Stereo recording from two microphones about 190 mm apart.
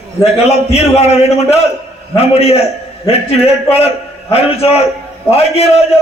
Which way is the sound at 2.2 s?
30° left (ahead or behind).